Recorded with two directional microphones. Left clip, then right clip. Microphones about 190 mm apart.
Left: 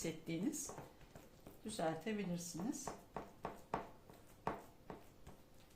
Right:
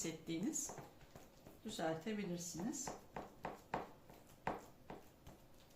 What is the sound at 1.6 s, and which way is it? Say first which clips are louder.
Speech: left 1 dB; 35° left (ahead or behind).